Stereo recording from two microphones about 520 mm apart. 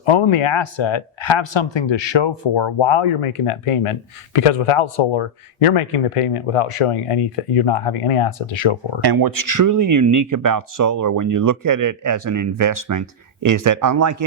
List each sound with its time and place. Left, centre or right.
0.0 s speech: left
9.0 s speech: right